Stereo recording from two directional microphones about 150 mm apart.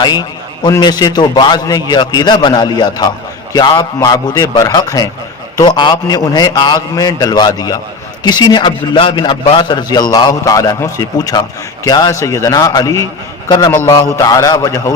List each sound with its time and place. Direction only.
0.0 s a man's voice: 30° left (ahead or behind)